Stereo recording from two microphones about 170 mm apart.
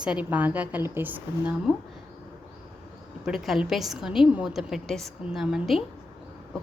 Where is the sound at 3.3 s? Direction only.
5° right (ahead or behind).